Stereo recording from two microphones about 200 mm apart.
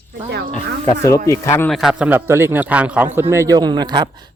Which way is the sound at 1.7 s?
Centre (ahead or behind).